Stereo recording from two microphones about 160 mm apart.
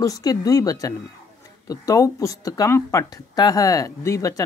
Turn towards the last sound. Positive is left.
turn(degrees=20)  # may be behind; listen again after turning